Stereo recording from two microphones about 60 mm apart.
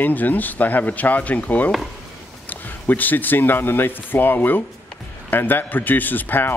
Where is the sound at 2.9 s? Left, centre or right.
Left.